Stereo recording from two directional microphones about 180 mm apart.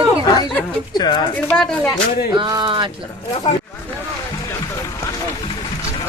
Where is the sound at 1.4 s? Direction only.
5° left (ahead or behind).